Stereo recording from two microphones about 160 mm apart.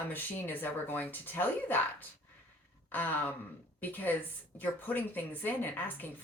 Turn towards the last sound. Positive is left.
turn(degrees=10)  # may be behind; listen again after turning